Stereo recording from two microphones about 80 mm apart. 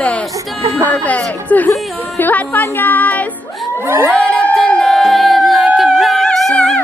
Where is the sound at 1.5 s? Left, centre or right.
Centre.